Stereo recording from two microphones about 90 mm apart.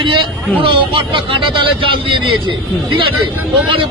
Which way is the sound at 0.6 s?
75° right (ahead or behind).